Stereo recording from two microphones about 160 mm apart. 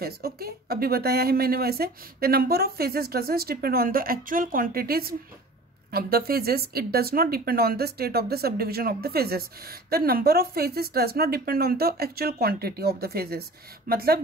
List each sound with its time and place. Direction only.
0.0 s speech: 75° right (ahead or behind)